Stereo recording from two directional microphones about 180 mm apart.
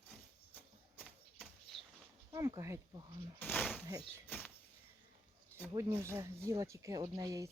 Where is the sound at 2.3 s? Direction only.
20° right (ahead or behind).